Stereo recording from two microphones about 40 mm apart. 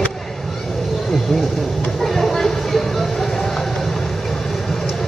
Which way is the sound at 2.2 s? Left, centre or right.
Centre.